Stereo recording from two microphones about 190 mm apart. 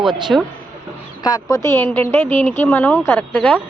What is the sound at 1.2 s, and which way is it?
Speech, 20° left (ahead or behind).